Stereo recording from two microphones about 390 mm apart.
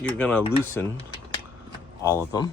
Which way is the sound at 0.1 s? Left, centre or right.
Centre.